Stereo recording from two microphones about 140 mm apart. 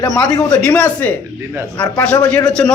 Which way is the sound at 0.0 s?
30° left (ahead or behind).